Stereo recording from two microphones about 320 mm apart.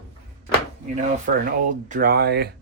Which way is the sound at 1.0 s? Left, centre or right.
Right.